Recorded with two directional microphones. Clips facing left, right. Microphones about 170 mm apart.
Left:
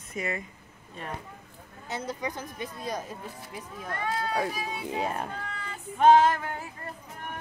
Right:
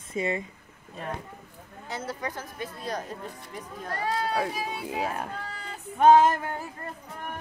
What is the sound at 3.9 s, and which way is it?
Speech, 35° right (ahead or behind).